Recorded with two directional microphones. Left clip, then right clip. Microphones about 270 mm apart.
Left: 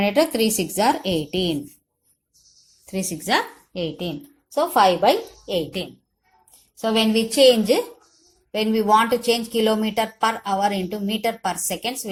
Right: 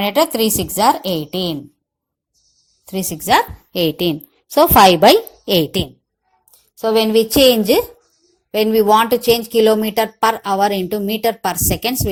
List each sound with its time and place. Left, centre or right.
0.0 s a woman's voice: right
2.8 s a woman's voice: right